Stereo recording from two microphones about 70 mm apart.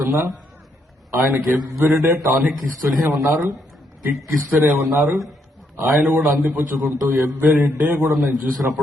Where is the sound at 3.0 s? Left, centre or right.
Centre.